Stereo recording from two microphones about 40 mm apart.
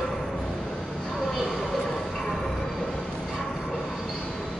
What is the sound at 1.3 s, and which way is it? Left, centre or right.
Vehicle, centre.